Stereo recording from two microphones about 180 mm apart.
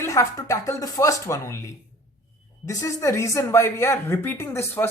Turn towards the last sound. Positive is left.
turn(degrees=15)  # may be behind; listen again after turning